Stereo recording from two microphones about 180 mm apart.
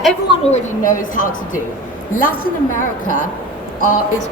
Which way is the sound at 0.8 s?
45° left (ahead or behind).